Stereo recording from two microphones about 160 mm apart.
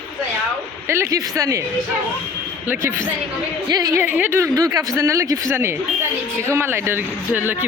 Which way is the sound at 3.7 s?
25° right (ahead or behind).